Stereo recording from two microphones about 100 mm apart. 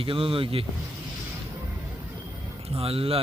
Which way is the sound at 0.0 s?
65° right (ahead or behind).